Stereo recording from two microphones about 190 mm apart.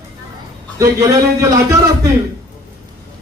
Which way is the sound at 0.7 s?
15° right (ahead or behind).